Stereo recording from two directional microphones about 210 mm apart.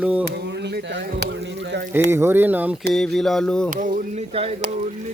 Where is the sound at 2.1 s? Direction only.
10° right (ahead or behind).